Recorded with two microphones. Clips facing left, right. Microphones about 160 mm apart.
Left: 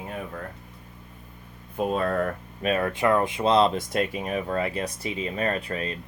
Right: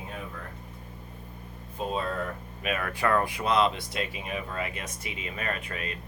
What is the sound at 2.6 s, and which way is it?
Speech, 35° left (ahead or behind).